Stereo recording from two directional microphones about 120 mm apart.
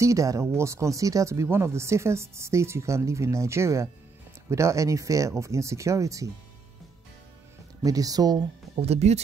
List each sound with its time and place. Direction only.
0.0 s speech: 25° right (ahead or behind)
7.8 s speech: 30° right (ahead or behind)
8.7 s speech: 60° right (ahead or behind)